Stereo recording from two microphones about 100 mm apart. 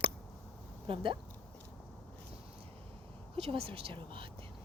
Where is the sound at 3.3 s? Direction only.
80° right; by 4.3 s 60° right (ahead or behind).